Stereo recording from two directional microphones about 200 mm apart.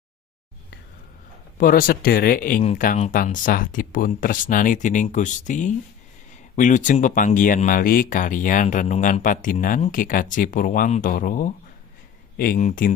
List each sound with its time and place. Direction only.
1.5 s speech: 45° left (ahead or behind)